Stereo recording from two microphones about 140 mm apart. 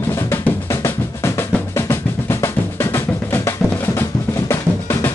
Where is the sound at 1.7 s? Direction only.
20° left (ahead or behind).